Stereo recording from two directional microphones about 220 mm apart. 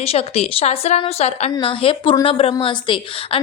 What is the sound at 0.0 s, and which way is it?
A woman's voice, 25° left (ahead or behind).